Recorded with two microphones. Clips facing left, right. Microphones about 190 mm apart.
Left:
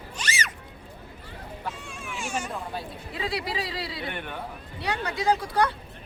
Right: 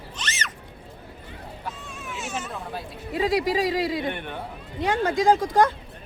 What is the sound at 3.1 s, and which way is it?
Speech, 45° right (ahead or behind).